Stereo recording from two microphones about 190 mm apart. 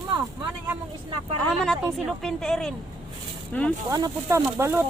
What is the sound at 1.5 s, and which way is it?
Speech, 5° left (ahead or behind).